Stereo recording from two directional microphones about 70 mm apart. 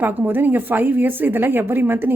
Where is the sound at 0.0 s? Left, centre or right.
Right.